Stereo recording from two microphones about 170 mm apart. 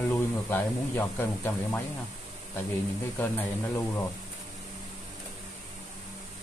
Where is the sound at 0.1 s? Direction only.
10° left (ahead or behind).